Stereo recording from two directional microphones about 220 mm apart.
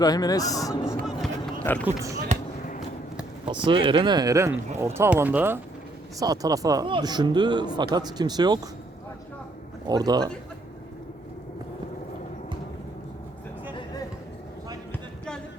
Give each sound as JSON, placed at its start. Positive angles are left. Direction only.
{"t": 0.0, "sound": "speech", "side_deg": 15}
{"t": 1.0, "sound": "speech", "side_deg": 5}
{"t": 2.3, "sound": "basketball bounce", "side_deg": -35}
{"t": 3.4, "sound": "speech", "side_deg": -20}
{"t": 9.8, "sound": "speech", "side_deg": -15}